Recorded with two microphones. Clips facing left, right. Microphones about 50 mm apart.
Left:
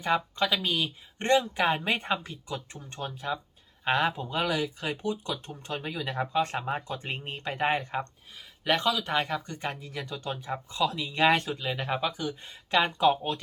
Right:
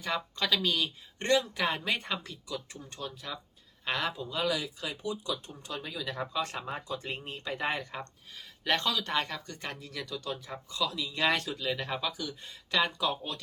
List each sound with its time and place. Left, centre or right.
0.0 s speech: left
0.4 s speech: centre
1.3 s speech: left
8.6 s speech: centre; by 13.4 s left